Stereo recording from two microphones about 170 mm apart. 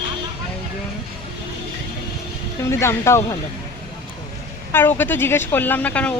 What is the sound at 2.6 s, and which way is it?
Speech, 15° left (ahead or behind).